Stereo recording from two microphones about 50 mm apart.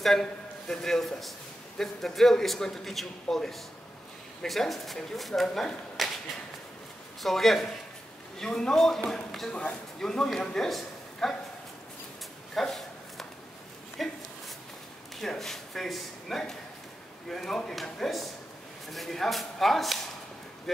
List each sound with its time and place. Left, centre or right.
0.0 s a man's voice: centre
7.2 s a man's voice: centre
8.4 s a man's voice: centre
9.5 s speech: left
9.9 s a man's voice: centre
10.7 s a sound: centre
12.5 s a sound: centre
14.0 s a man's voice: centre